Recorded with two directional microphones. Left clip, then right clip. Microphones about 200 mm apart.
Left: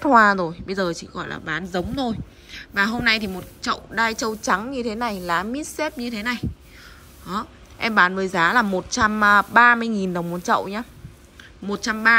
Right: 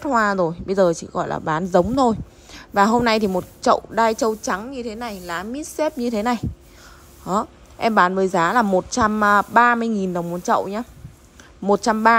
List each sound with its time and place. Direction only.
0.0 s a woman's voice: 10° right (ahead or behind)
2.7 s a woman's voice: 25° right (ahead or behind); by 5.7 s 10° right (ahead or behind)
5.8 s a woman's voice: 20° right (ahead or behind)
11.6 s a woman's voice: 25° right (ahead or behind)